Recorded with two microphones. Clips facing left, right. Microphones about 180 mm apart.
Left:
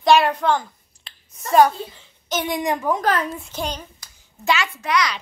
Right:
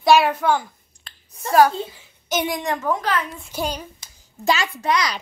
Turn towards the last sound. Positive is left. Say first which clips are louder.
# even
turn(degrees=-30)  # may be behind; listen again after turning